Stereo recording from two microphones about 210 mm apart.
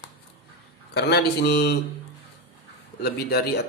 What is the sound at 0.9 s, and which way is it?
Speech, 50° left (ahead or behind).